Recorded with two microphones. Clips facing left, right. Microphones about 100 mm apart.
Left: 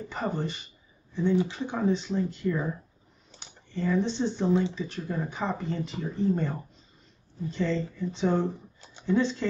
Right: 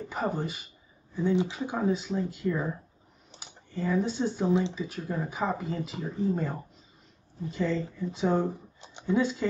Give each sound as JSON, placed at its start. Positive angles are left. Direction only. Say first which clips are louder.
{"t": 0.1, "sound": "speech", "louder": "even", "side_deg": -5}
{"t": 7.5, "sound": "speech", "louder": "even", "side_deg": -5}
{"t": 8.8, "sound": "a sound", "louder": "even", "side_deg": -20}
{"t": 9.1, "sound": "speech", "louder": "left 1 dB", "side_deg": -10}